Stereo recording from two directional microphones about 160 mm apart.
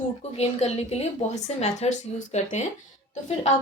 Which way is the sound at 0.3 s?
40° left (ahead or behind).